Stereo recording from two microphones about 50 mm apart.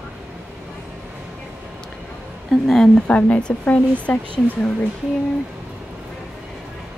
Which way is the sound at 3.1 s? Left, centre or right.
Left.